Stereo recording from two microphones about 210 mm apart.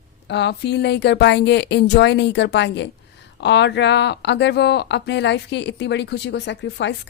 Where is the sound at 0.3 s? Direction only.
55° left (ahead or behind).